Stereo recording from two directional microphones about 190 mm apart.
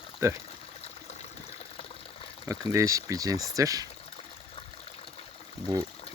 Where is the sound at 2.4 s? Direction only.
15° right (ahead or behind).